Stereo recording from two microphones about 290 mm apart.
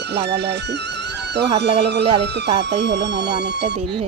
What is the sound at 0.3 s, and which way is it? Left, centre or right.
Music, right.